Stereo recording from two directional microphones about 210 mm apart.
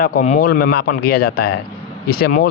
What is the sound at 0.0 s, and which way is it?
Speech, 40° left (ahead or behind).